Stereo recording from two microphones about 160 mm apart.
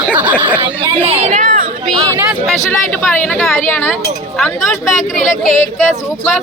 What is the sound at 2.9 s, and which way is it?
A woman's voice, 10° left (ahead or behind).